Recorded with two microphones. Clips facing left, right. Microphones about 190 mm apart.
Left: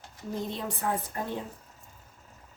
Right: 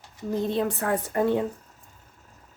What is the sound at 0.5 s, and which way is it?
Speech, 70° right (ahead or behind).